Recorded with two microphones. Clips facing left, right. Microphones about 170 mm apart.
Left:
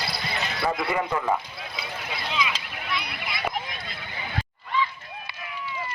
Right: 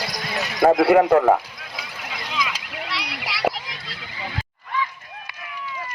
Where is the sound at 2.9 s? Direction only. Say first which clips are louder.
Left 1 dB; 90° right.